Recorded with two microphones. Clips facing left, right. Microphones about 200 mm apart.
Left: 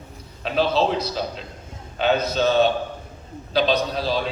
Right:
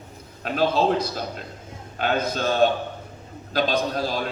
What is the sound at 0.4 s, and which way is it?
A man's voice, 45° right (ahead or behind).